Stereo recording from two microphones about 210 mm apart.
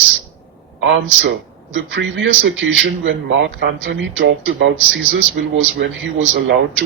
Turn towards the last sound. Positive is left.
turn(degrees=-60)  # may be behind; listen again after turning